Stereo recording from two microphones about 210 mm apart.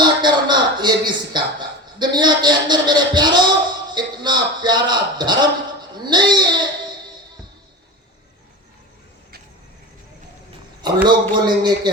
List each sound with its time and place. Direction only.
0.0 s music: 20° right (ahead or behind)
3.9 s a man's voice: 20° right (ahead or behind)
10.8 s a man's voice: 20° right (ahead or behind)